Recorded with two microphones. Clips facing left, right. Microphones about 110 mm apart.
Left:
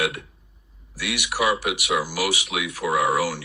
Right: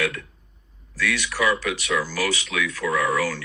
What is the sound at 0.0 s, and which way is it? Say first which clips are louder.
Speech: even; 20° left (ahead or behind).